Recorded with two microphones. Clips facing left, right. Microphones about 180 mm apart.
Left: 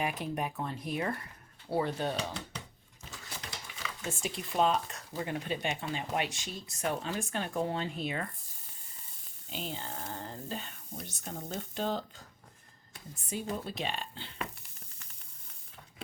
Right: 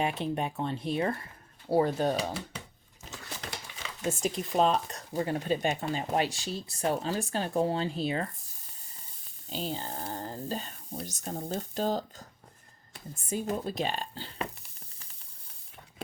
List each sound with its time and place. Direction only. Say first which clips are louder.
0.0 s speech: right 4 dB; 25° right (ahead or behind)
1.7 s speech: right 6 dB; 40° right (ahead or behind)
4.0 s speech: right 8 dB; 40° right (ahead or behind)
9.5 s speech: right 5 dB; 35° right (ahead or behind)